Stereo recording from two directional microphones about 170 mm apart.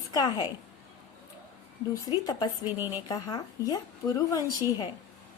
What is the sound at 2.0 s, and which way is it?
Speech, 20° left (ahead or behind).